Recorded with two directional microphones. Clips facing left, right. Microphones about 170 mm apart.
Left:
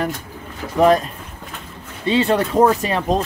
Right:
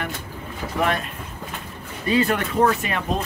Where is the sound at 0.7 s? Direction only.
35° left (ahead or behind).